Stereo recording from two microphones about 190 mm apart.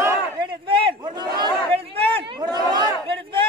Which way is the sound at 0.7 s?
25° right (ahead or behind).